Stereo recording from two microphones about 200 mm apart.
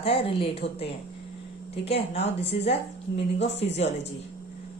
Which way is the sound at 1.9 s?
30° left (ahead or behind).